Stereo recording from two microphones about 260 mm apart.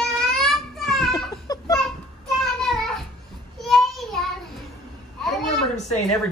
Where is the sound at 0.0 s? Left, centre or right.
Centre.